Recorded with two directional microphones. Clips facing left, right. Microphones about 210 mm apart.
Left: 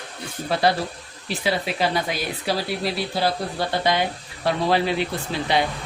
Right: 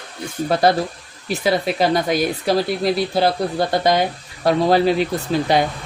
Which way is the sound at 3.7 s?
45° right (ahead or behind).